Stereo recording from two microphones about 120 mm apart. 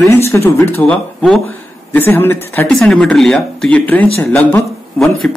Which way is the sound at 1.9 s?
15° left (ahead or behind).